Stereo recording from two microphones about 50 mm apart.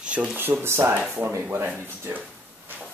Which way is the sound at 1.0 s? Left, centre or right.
Right.